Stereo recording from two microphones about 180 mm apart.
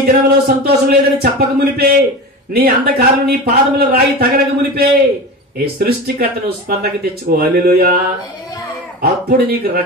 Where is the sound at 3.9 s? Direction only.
60° right (ahead or behind).